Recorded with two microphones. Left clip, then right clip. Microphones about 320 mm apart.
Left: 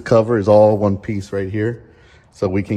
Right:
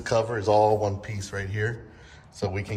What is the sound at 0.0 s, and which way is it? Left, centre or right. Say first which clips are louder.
Speech: left 10 dB; centre.